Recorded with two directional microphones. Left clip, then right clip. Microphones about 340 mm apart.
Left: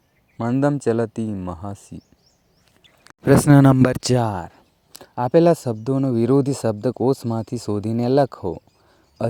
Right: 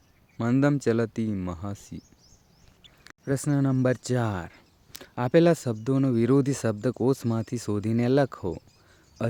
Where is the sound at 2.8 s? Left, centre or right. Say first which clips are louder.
Left 1 dB; centre.